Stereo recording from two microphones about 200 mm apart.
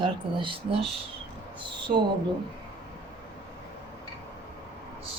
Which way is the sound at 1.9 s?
40° right (ahead or behind).